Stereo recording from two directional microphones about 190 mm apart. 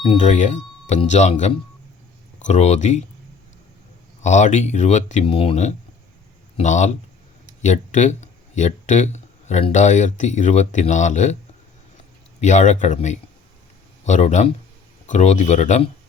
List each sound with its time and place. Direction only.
0.2 s speech: 40° left (ahead or behind)
4.2 s speech: 40° left (ahead or behind)
12.4 s speech: 40° left (ahead or behind)